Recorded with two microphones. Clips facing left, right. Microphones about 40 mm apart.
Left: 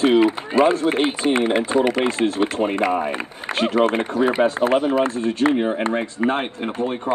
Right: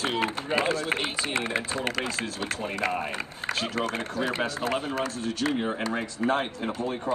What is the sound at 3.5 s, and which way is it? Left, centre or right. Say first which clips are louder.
Speech: left 11 dB; left.